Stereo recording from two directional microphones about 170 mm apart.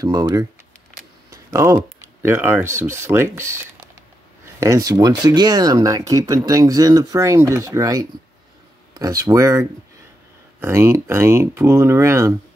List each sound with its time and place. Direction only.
0.0 s speech: 20° right (ahead or behind)
1.3 s a sound: 20° right (ahead or behind)
2.2 s speech: 15° right (ahead or behind)